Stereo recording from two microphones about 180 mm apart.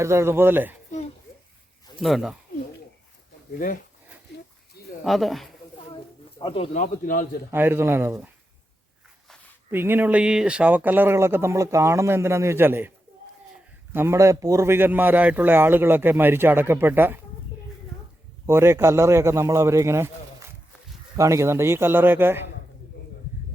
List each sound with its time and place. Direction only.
0.0 s a man's voice: 15° right (ahead or behind)
2.0 s speech: centre (ahead or behind)
5.0 s speech: centre (ahead or behind)
6.4 s speech: 30° left (ahead or behind); by 7.3 s 50° left (ahead or behind)
7.5 s a man's voice: 10° right (ahead or behind)
9.7 s a man's voice: 10° right (ahead or behind)
13.9 s a man's voice: 15° right (ahead or behind)
18.4 s a man's voice: 15° right (ahead or behind)